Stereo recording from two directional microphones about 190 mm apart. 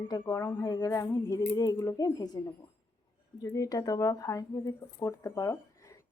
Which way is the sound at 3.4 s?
15° left (ahead or behind).